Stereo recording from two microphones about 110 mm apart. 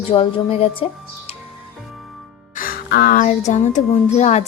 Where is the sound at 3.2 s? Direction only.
90° left.